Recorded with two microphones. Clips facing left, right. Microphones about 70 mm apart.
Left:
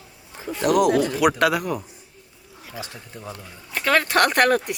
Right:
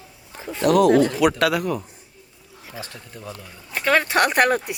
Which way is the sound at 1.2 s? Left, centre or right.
Centre.